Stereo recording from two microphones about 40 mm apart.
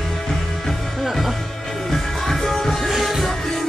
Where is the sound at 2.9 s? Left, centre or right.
Centre.